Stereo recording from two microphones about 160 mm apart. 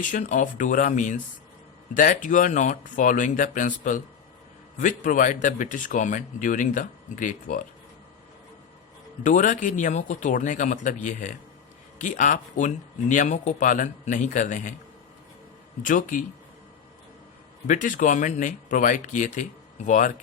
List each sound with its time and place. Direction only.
0.0 s speech: 50° left (ahead or behind)
9.2 s speech: 55° left (ahead or behind)
15.8 s speech: 55° left (ahead or behind)
17.7 s speech: 55° left (ahead or behind)